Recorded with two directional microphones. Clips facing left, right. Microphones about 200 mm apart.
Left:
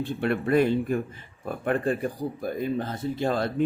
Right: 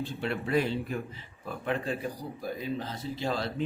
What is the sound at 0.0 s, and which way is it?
Speech, 55° left (ahead or behind).